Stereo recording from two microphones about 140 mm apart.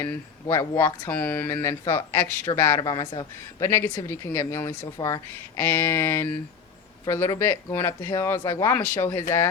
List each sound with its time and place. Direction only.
0.0 s speech: 20° left (ahead or behind)
2.8 s a man's voice: 30° left (ahead or behind)
3.6 s speech: 20° left (ahead or behind)